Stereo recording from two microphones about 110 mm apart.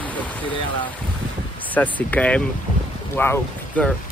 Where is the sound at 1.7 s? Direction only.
15° left (ahead or behind).